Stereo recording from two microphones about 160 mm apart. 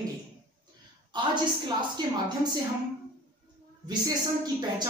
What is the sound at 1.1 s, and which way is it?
A woman's voice, 30° right (ahead or behind).